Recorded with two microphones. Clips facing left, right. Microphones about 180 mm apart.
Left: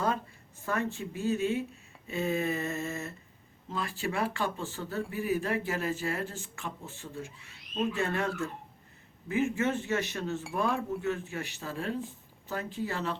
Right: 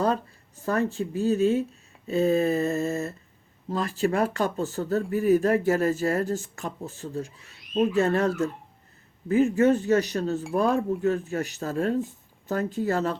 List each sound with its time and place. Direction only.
0.6 s speech: 40° right (ahead or behind)